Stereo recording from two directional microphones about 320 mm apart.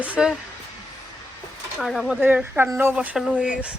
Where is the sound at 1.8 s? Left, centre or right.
Centre.